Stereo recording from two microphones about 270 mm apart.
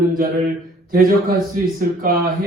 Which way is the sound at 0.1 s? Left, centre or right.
Right.